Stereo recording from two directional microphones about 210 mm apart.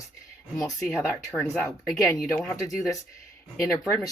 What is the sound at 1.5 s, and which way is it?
Speech, 10° left (ahead or behind).